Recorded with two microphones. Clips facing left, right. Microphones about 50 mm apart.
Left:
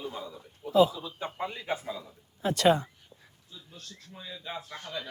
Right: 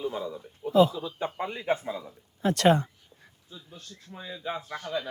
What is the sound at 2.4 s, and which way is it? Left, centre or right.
Speech, right.